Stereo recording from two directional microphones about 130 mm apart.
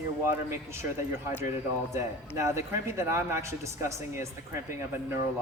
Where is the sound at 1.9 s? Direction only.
20° right (ahead or behind).